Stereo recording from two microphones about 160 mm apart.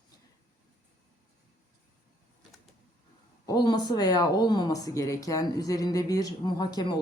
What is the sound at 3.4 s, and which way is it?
Speech, 25° left (ahead or behind).